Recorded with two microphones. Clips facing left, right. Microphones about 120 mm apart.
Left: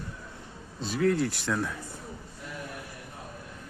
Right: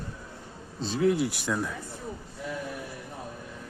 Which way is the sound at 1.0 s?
15° right (ahead or behind).